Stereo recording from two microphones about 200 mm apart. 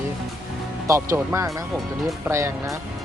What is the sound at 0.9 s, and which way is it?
Speech, 15° right (ahead or behind).